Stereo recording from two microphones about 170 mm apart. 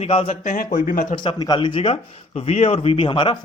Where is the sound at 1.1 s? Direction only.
30° left (ahead or behind).